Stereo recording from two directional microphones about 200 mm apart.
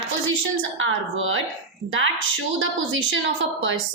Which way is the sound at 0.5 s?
80° right.